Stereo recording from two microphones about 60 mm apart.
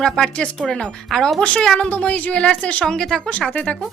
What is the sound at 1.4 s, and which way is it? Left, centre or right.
Speech, centre.